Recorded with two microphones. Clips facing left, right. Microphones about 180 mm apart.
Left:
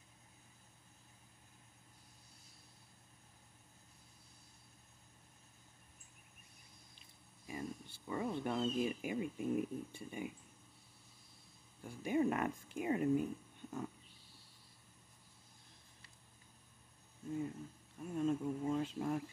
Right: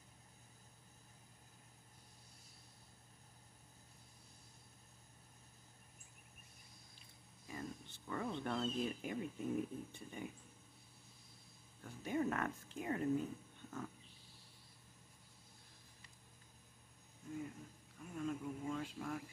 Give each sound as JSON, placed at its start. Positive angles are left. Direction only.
{"t": 7.0, "sound": "speech", "side_deg": 15}
{"t": 11.8, "sound": "speech", "side_deg": 10}
{"t": 17.9, "sound": "a sound", "side_deg": 25}